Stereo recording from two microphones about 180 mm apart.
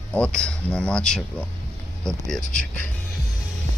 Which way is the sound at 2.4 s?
45° left (ahead or behind).